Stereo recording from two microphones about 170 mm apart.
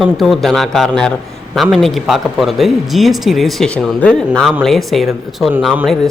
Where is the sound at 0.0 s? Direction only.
Centre (ahead or behind).